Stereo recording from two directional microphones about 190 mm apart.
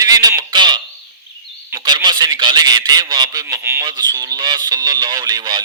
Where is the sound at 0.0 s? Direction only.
20° right (ahead or behind).